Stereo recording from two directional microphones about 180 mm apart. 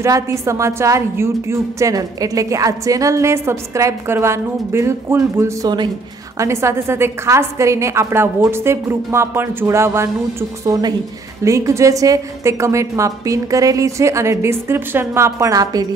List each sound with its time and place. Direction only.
0.0 s a woman's voice: 15° right (ahead or behind)